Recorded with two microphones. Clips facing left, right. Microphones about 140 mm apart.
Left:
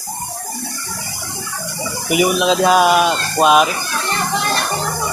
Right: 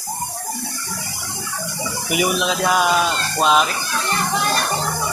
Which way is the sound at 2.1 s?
20° left (ahead or behind).